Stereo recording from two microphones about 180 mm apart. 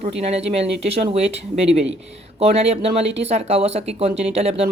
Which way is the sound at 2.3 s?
35° right (ahead or behind).